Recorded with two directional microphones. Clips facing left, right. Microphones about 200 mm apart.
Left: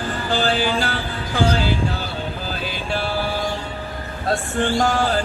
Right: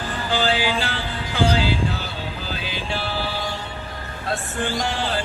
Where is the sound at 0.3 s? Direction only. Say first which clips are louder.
Left 1 dB; 50° left (ahead or behind).